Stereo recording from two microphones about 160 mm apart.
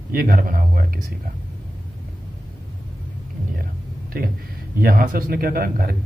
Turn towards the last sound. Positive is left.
turn(degrees=-65)  # may be behind; listen again after turning